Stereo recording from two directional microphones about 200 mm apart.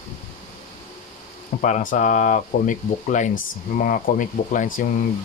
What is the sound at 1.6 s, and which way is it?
Speech, 40° left (ahead or behind).